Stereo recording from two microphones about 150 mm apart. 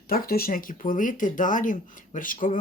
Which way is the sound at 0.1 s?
90° left.